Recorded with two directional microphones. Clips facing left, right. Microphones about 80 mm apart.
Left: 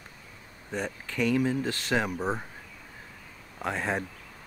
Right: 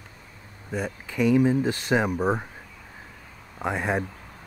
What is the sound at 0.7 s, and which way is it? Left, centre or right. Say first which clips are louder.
Speech: right 3 dB; centre.